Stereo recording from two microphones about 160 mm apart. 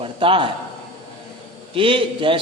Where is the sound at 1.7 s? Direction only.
35° right (ahead or behind).